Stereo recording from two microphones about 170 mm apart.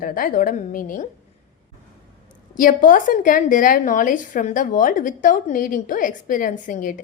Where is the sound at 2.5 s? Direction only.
50° left (ahead or behind).